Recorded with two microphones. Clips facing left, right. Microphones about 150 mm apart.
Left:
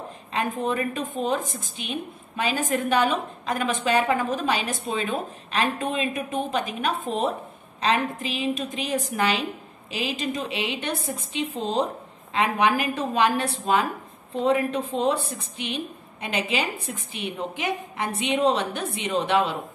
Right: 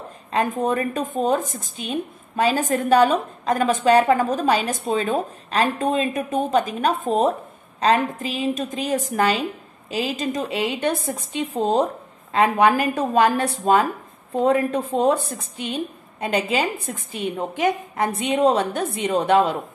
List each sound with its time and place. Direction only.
0.3 s a woman's voice: 40° right (ahead or behind)